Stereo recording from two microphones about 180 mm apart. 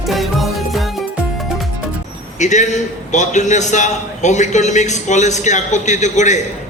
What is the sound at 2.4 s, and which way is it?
A man's voice, 40° left (ahead or behind).